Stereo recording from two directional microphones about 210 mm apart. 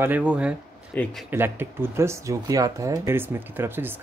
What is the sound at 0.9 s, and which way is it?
Speech, 5° left (ahead or behind).